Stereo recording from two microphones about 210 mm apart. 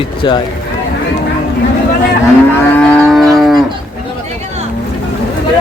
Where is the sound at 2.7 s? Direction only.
5° left (ahead or behind).